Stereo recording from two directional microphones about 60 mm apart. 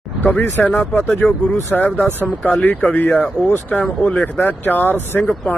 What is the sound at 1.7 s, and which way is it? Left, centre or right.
Speech, left.